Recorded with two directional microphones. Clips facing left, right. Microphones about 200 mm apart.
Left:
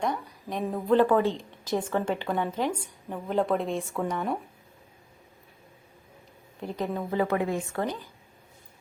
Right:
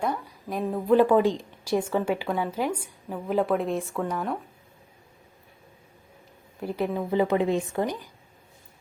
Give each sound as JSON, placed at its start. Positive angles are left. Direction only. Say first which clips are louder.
{"t": 0.0, "sound": "a woman's voice", "louder": "right 1 dB", "side_deg": -5}
{"t": 6.6, "sound": "speech", "louder": "right 3 dB", "side_deg": -5}